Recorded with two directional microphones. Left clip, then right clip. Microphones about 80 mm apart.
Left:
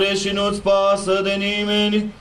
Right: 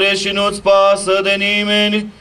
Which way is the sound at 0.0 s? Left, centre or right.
Right.